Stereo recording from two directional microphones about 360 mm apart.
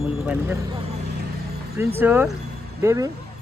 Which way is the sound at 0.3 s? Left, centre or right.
Centre.